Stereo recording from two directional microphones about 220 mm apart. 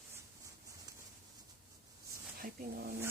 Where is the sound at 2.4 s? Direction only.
40° right (ahead or behind).